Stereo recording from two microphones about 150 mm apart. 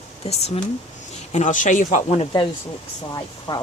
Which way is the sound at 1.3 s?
55° left (ahead or behind).